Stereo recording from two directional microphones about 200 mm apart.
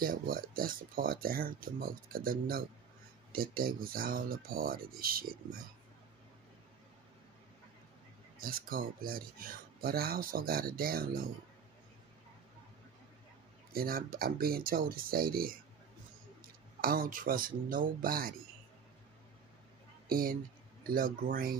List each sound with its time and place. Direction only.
0.0 s speech: 45° right (ahead or behind)
8.4 s speech: 45° right (ahead or behind)
13.7 s speech: 45° right (ahead or behind)
16.8 s speech: 45° right (ahead or behind)
20.1 s a woman's voice: 45° right (ahead or behind)